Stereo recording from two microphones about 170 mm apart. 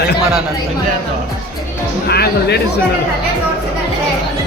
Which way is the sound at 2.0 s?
70° left (ahead or behind).